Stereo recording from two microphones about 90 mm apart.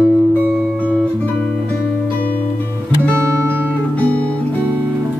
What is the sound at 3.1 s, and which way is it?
Guitar, 30° right (ahead or behind).